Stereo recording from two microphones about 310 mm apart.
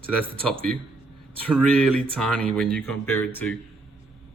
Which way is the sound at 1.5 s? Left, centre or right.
Centre.